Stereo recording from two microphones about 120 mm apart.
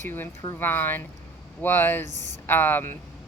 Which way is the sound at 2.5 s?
15° left (ahead or behind).